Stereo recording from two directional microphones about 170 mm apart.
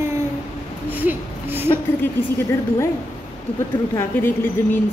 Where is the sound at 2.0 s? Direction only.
15° left (ahead or behind).